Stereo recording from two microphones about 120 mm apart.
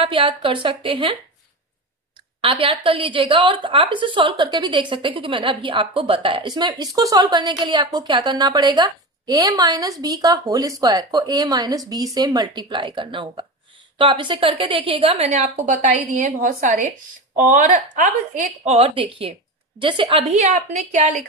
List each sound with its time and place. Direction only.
0.1 s a woman's voice: 45° right (ahead or behind)
2.4 s a woman's voice: 50° right (ahead or behind); by 18.9 s 70° right (ahead or behind)
18.9 s a woman's voice: 50° right (ahead or behind)
20.1 s a woman's voice: 60° right (ahead or behind); by 21.1 s 75° right (ahead or behind)